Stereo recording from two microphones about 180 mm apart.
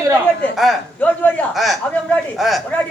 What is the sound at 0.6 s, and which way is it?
A man's voice, centre (ahead or behind).